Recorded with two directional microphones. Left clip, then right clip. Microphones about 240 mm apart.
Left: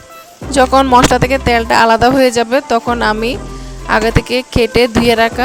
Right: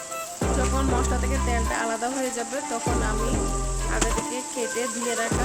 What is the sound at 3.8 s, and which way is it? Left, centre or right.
Speech, left.